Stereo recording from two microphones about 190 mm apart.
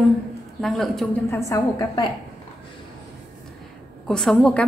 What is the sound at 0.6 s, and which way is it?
Speech, centre (ahead or behind).